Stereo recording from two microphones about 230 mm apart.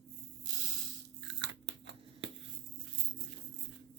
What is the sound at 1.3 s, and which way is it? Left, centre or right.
Crunch, right.